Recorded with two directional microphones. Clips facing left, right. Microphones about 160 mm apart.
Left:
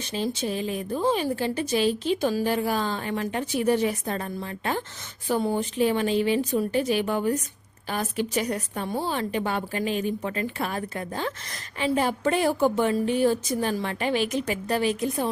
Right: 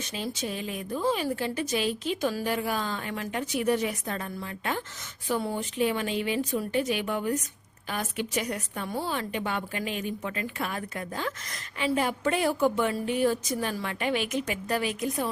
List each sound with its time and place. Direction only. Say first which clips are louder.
0.0 s a woman's voice: left 5 dB; 30° left (ahead or behind)